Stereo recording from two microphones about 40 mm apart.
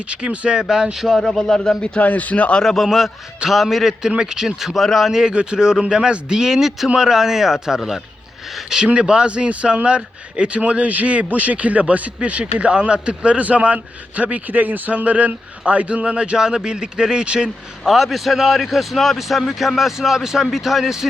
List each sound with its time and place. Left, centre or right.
0.1 s speech: right
0.6 s a man's voice: centre
1.0 s speech: centre
2.0 s speech: left
2.6 s a man's voice: centre
4.2 s a man's voice: centre
4.7 s a man's voice: centre
5.3 s a man's voice: right
8.9 s speech: right
17.8 s a man's voice: centre